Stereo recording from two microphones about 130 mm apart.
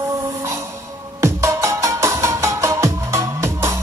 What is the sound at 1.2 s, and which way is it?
Music, 25° right (ahead or behind).